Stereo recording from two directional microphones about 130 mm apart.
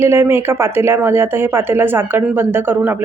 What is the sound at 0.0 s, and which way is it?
A woman's voice, 20° right (ahead or behind).